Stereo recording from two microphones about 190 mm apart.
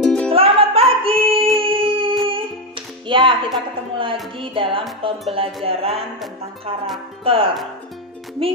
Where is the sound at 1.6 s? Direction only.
30° right (ahead or behind).